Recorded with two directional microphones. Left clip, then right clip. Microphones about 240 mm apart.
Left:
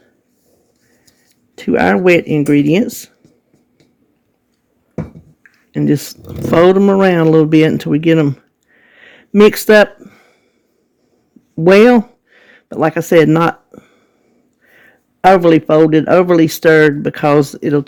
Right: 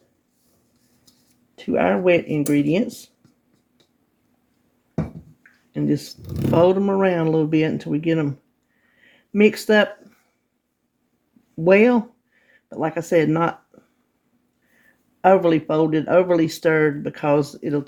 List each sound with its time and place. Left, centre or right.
1.5 s speech: left
5.7 s speech: left
9.0 s a sound: left
11.6 s speech: left
15.2 s speech: left